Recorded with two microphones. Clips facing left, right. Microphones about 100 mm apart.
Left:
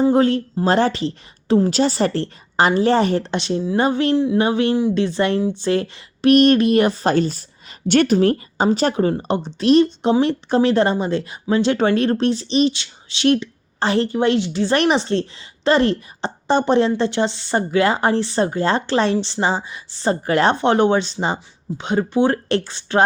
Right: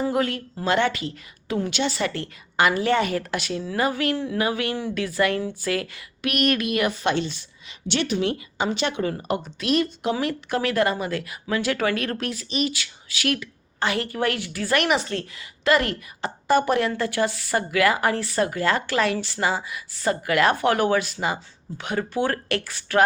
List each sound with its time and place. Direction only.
0.0 s a woman's voice: 30° left (ahead or behind)